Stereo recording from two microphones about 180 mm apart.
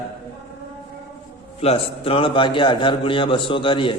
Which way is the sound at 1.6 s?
30° left (ahead or behind).